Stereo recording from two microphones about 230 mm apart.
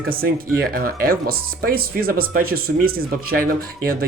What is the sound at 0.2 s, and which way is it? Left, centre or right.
Speech, right.